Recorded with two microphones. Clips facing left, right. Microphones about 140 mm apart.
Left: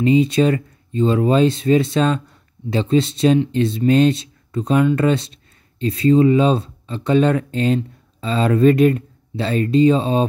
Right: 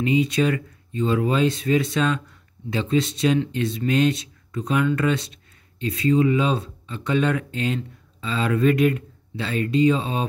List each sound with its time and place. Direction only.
0.0 s speech: 30° left (ahead or behind)